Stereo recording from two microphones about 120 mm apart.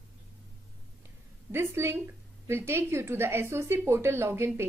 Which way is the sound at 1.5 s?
20° right (ahead or behind).